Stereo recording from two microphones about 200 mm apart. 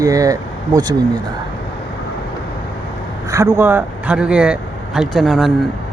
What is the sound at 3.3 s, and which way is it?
Speech, 15° right (ahead or behind).